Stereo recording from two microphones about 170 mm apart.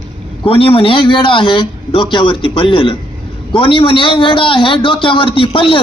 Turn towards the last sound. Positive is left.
turn(degrees=30)  # may be behind; listen again after turning